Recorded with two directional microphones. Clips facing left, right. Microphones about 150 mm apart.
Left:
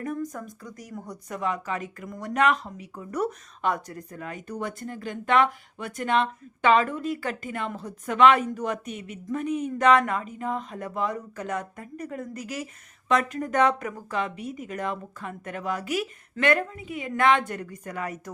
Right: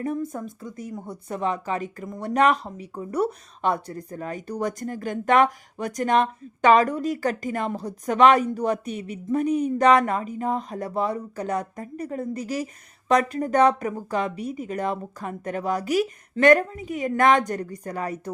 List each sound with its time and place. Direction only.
0.0 s speech: 30° right (ahead or behind)